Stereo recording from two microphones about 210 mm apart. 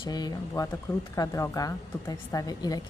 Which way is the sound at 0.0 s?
20° left (ahead or behind).